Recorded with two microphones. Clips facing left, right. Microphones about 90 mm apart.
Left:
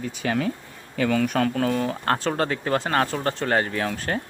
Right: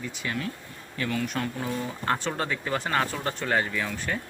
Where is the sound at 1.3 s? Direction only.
90° left; by 2.2 s 60° left (ahead or behind).